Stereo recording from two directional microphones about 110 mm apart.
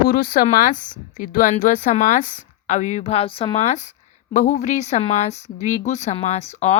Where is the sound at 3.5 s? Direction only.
90° left.